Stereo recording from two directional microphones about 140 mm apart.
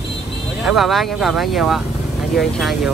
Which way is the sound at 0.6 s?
Centre (ahead or behind).